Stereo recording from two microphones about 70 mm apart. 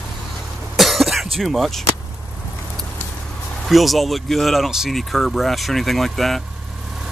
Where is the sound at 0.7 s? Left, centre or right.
Centre.